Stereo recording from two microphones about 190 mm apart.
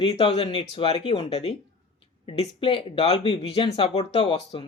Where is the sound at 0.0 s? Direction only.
30° left (ahead or behind).